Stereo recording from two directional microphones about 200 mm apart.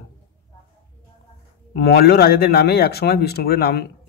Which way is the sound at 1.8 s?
55° left (ahead or behind).